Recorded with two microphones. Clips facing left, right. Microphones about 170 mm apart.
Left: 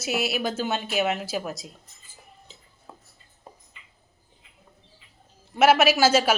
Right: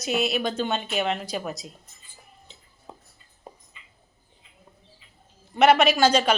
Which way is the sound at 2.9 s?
20° right (ahead or behind).